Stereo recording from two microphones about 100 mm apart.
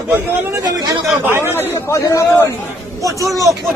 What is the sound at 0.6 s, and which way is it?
Speech, 40° right (ahead or behind).